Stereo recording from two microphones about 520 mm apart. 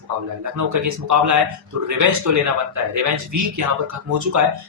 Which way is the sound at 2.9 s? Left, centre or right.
Right.